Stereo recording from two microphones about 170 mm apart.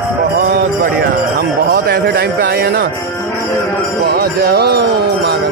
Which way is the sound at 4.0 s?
65° right (ahead or behind).